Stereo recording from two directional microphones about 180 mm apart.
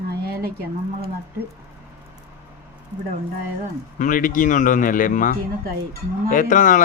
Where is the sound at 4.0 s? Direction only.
45° left (ahead or behind).